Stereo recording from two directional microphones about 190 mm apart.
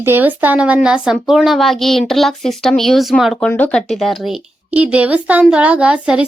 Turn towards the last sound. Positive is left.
turn(degrees=-5)  # may be behind; listen again after turning